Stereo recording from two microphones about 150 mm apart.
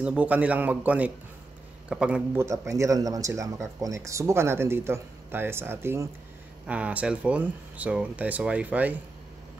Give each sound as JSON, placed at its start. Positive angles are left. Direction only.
{"t": 0.0, "sound": "speech", "side_deg": -10}
{"t": 2.3, "sound": "speech", "side_deg": -20}